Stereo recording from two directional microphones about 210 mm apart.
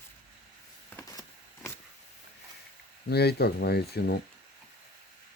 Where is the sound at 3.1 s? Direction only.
50° left (ahead or behind).